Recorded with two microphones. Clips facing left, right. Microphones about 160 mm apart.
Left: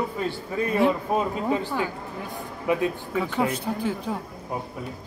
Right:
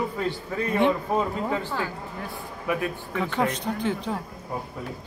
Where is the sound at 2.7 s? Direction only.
20° left (ahead or behind).